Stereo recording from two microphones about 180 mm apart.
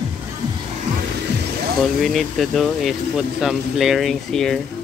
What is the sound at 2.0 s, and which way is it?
Speech, centre (ahead or behind).